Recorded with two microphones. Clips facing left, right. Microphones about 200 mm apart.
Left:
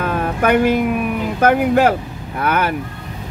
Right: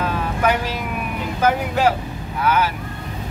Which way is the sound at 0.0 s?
55° left (ahead or behind).